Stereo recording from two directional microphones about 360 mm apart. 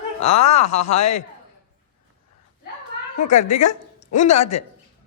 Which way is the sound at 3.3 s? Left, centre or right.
Left.